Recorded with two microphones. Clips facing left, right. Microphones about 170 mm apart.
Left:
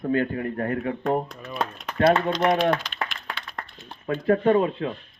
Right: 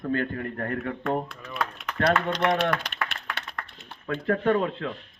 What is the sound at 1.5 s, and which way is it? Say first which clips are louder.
Speech: left 2 dB; 30° left (ahead or behind).